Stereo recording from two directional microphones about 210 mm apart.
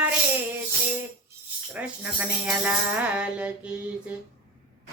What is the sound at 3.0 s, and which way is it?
Music, 5° right (ahead or behind).